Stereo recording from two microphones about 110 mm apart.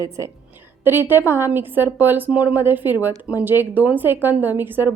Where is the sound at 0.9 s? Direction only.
20° right (ahead or behind).